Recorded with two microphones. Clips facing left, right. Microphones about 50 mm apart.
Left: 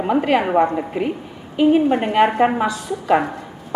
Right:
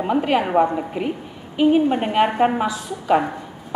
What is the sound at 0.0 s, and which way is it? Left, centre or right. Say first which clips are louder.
Speech: left 2 dB; centre.